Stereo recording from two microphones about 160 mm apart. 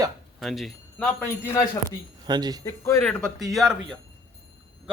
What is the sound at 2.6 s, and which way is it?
Speech, 20° left (ahead or behind).